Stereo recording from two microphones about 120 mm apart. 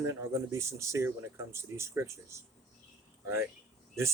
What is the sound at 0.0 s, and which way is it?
Speech, 25° right (ahead or behind).